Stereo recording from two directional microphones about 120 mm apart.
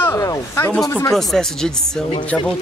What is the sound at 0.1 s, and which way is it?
Speech, 25° left (ahead or behind).